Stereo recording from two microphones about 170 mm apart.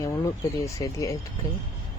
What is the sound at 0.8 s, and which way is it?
Speech, 20° left (ahead or behind).